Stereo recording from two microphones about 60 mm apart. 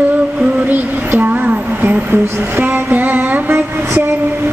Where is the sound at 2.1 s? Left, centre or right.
Right.